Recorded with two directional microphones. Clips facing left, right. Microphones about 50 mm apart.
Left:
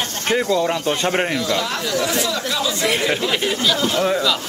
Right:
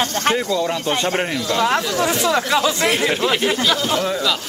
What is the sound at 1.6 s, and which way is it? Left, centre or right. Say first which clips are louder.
Speech: right 4 dB; right.